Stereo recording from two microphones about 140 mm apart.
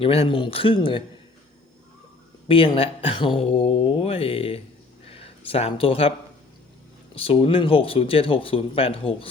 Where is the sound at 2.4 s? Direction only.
40° left (ahead or behind).